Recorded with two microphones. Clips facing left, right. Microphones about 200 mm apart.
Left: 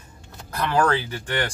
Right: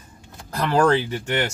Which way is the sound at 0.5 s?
30° right (ahead or behind).